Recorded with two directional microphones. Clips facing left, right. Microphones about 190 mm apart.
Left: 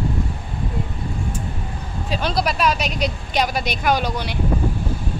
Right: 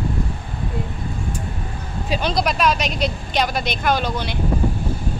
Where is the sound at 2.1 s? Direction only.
Centre (ahead or behind).